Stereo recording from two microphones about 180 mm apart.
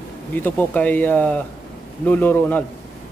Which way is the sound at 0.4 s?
10° left (ahead or behind).